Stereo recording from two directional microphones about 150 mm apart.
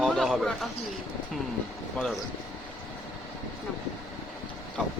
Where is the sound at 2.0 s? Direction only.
10° left (ahead or behind).